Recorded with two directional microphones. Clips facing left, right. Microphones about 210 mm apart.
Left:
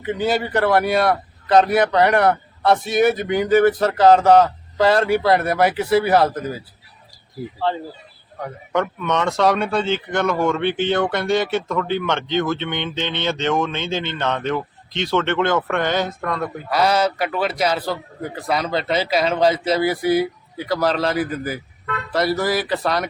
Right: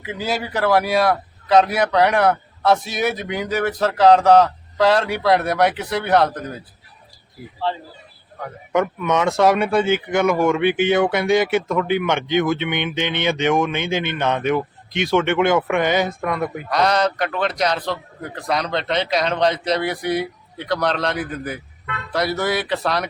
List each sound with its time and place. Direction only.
0.0 s a man's voice: centre (ahead or behind)
8.7 s speech: 10° right (ahead or behind)
16.6 s a man's voice: 5° left (ahead or behind)